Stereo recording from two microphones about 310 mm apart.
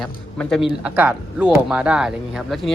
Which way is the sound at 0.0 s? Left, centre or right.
Centre.